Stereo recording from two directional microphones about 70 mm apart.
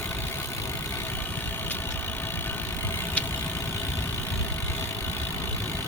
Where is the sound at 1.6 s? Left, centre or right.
Left.